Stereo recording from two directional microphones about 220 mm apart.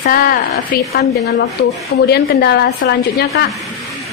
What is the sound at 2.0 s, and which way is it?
A woman's voice, 45° left (ahead or behind).